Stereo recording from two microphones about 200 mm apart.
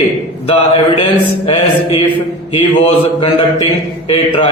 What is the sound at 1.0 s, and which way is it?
A man's voice, 30° left (ahead or behind).